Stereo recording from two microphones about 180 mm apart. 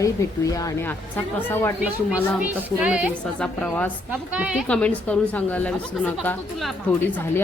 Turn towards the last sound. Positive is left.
turn(degrees=5)  # may be behind; listen again after turning